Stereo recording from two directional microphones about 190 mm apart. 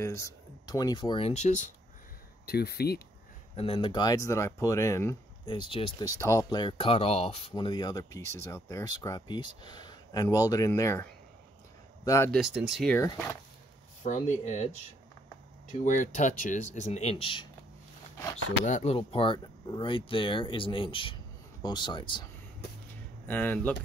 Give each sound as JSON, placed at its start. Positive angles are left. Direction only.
{"t": 0.0, "sound": "speech", "side_deg": 15}
{"t": 2.4, "sound": "speech", "side_deg": 55}
{"t": 3.5, "sound": "speech", "side_deg": 30}
{"t": 12.3, "sound": "speech", "side_deg": 0}
{"t": 14.0, "sound": "speech", "side_deg": 40}
{"t": 15.8, "sound": "speech", "side_deg": 40}
{"t": 18.7, "sound": "speech", "side_deg": 35}
{"t": 23.2, "sound": "speech", "side_deg": 10}